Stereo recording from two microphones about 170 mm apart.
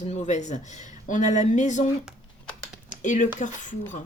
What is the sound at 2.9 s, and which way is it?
Speech, 50° left (ahead or behind).